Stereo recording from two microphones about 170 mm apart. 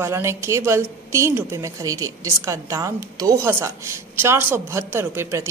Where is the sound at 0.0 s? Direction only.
15° right (ahead or behind).